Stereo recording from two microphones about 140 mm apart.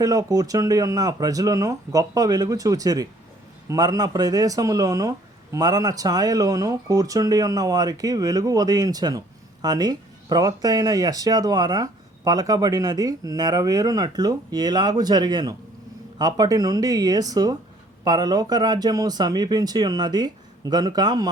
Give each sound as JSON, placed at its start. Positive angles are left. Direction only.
{"t": 0.0, "sound": "speech", "side_deg": -25}